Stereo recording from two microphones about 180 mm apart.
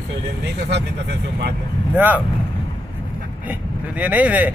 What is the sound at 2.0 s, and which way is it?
Speech, 10° right (ahead or behind).